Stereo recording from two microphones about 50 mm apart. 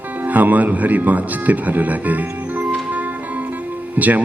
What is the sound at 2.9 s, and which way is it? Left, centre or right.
Music, right.